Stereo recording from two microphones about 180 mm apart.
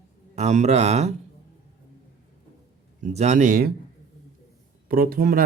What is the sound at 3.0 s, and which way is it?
Speech, 40° right (ahead or behind).